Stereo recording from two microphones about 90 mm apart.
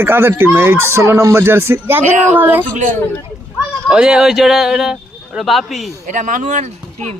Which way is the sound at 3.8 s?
10° right (ahead or behind).